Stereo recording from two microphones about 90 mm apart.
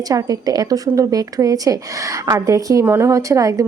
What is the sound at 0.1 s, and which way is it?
Speech, 40° right (ahead or behind).